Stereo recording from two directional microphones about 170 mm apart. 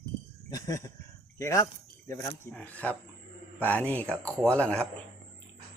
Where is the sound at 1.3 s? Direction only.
20° left (ahead or behind).